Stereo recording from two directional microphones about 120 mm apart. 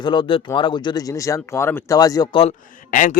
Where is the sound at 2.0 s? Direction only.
30° left (ahead or behind).